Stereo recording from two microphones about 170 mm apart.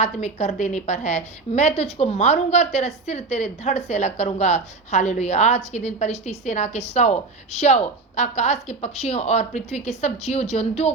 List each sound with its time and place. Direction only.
0.0 s a woman's voice: 40° left (ahead or behind)